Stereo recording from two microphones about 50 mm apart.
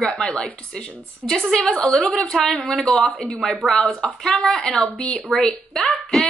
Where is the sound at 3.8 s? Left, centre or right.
Centre.